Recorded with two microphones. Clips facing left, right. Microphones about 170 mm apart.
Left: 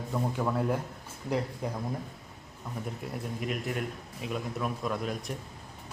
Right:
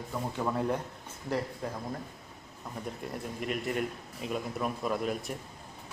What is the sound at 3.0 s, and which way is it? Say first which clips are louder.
A man's voice: left 1 dB; centre (ahead or behind).